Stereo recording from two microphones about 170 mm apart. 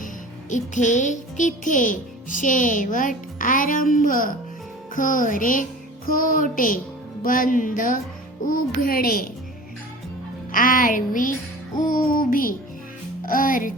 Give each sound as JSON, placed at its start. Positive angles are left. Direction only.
{"t": 0.5, "sound": "a child's voice", "side_deg": 45}
{"t": 10.5, "sound": "a child's voice", "side_deg": 55}